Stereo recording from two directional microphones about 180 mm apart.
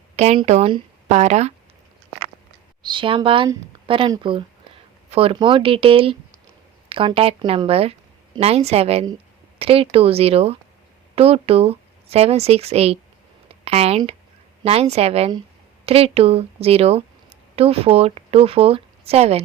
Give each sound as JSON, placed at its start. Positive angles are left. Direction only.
{"t": 0.2, "sound": "a woman's voice", "side_deg": -35}
{"t": 2.8, "sound": "a woman's voice", "side_deg": -25}